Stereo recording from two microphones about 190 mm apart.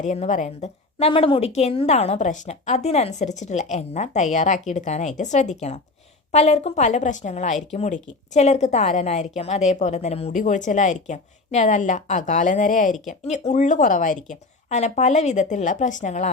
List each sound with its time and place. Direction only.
0.0 s a woman's voice: 40° left (ahead or behind)